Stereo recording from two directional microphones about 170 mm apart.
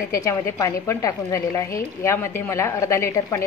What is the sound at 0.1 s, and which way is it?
A woman's voice, 20° left (ahead or behind).